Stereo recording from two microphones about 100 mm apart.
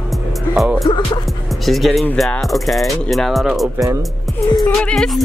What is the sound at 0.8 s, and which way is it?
Music, 45° left (ahead or behind).